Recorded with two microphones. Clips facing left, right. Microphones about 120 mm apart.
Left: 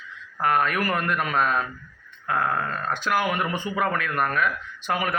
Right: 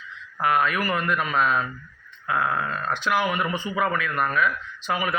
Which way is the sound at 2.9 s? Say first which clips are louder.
Even; 50° left (ahead or behind).